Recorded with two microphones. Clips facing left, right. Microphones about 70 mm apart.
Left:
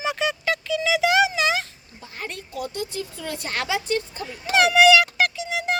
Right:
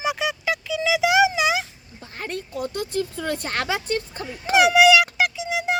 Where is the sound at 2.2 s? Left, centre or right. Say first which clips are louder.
Right 3 dB; right.